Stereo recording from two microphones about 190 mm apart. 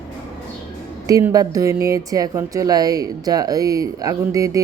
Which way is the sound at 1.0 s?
20° right (ahead or behind).